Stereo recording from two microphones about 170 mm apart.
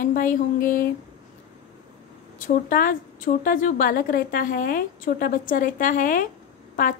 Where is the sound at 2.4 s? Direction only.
55° left (ahead or behind).